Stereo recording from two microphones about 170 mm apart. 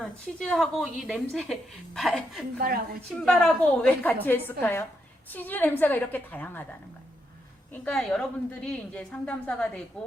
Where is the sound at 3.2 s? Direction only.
5° left (ahead or behind).